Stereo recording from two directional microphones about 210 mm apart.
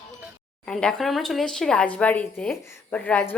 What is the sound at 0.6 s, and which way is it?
Speech, 5° left (ahead or behind).